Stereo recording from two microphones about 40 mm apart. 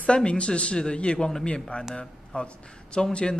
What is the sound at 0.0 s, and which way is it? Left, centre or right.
Speech, left.